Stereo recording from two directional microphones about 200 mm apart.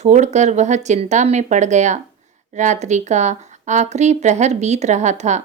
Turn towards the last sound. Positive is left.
turn(degrees=-35)  # may be behind; listen again after turning